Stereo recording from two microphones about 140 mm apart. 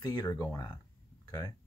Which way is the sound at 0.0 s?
25° left (ahead or behind).